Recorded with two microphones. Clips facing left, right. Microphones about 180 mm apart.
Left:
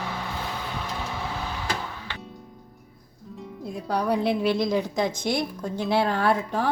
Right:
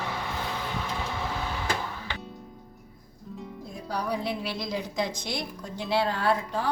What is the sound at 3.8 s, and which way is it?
A woman's voice, 60° left (ahead or behind).